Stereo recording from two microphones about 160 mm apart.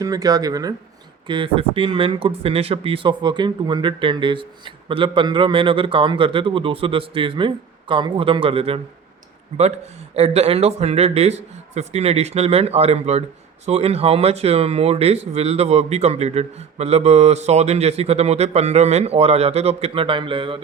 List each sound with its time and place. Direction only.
0.0 s speech: 25° right (ahead or behind)
1.3 s speech: 35° right (ahead or behind)
9.5 s speech: 45° right (ahead or behind)